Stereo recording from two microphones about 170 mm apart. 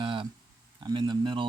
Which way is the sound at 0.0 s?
30° right (ahead or behind).